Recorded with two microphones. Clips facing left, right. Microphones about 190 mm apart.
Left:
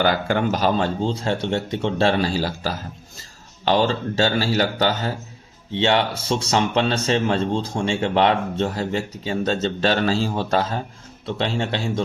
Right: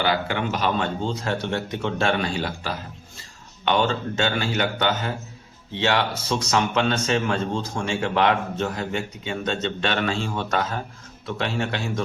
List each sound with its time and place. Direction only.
0.0 s a man's voice: 45° left (ahead or behind); by 12.0 s 30° left (ahead or behind)